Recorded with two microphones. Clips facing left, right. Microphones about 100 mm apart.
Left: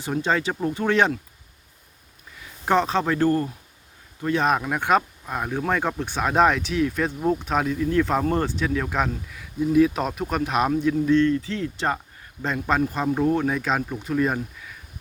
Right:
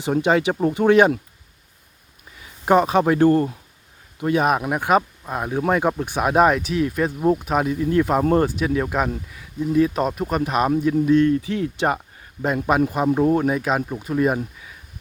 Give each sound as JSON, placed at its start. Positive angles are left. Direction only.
{"t": 0.2, "sound": "speech", "side_deg": -15}
{"t": 2.6, "sound": "speech", "side_deg": -10}
{"t": 4.2, "sound": "speech", "side_deg": -10}
{"t": 13.3, "sound": "speech", "side_deg": -10}